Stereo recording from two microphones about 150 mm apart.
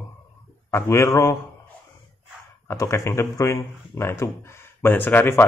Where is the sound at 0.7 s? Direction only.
15° left (ahead or behind).